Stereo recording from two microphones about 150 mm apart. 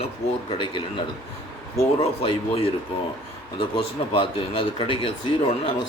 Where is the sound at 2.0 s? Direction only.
40° left (ahead or behind).